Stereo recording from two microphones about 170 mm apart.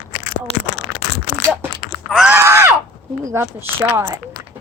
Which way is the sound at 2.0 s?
Centre (ahead or behind).